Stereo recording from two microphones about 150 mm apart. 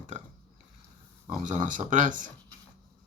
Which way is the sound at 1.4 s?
60° right (ahead or behind).